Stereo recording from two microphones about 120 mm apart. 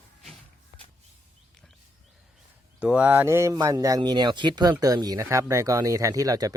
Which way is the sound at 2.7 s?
10° right (ahead or behind).